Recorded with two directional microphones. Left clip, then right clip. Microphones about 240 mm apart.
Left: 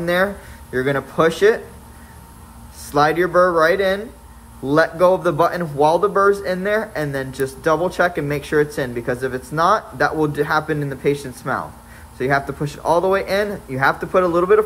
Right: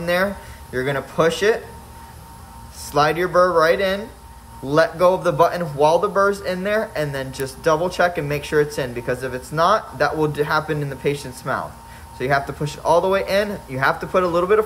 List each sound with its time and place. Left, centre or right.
0.0 s speech: centre
2.8 s a man's voice: centre